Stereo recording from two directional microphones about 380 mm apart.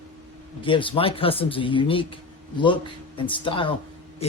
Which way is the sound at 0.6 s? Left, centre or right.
Centre.